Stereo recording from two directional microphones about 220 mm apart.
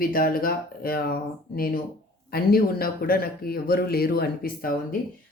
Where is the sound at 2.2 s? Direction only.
45° left (ahead or behind).